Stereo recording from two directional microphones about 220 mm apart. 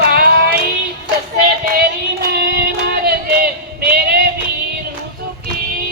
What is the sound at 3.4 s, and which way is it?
Female singing, 45° right (ahead or behind).